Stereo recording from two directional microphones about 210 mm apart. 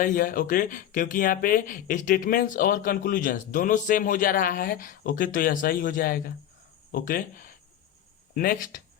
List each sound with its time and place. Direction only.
0.0 s speech: 40° left (ahead or behind)